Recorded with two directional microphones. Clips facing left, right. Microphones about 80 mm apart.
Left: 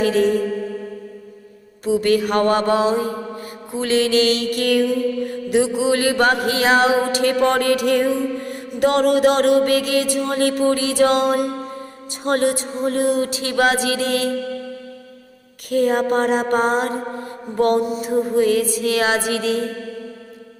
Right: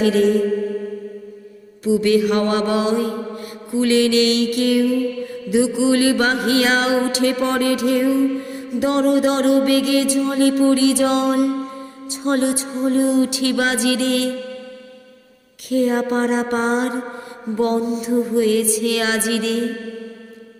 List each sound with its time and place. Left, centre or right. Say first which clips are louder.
0.0 s mantra: right 1 dB; left
1.8 s mantra: right 1 dB; left
5.5 s a sound: right 1 dB; left
15.7 s a sound: left 1 dB; left
17.6 s music: left 2 dB; left
17.9 s mantra: even; left